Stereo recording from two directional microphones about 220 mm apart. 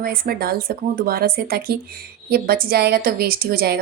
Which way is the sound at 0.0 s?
45° right (ahead or behind).